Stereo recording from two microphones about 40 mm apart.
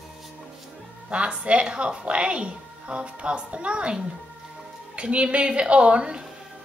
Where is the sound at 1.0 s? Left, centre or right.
Right.